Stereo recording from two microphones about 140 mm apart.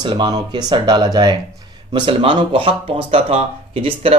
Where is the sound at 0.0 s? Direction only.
35° right (ahead or behind).